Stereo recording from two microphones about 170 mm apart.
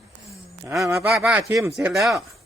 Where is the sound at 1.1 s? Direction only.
5° right (ahead or behind).